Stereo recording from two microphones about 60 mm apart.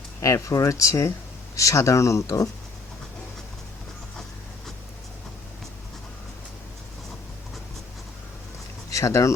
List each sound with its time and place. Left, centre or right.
0.2 s speech: left
8.9 s speech: left